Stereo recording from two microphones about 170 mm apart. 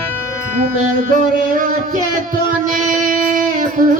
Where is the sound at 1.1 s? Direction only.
55° right (ahead or behind).